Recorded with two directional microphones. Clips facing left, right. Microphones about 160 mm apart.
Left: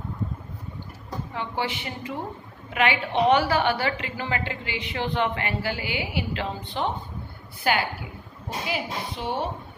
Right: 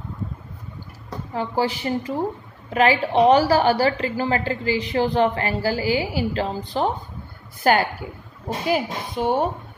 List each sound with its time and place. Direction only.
1.3 s a woman's voice: 35° right (ahead or behind)